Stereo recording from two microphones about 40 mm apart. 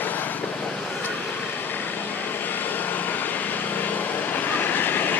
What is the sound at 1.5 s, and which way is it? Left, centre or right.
Vehicle, left.